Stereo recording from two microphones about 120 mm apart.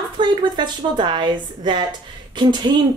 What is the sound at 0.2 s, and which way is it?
A woman's voice, 40° right (ahead or behind).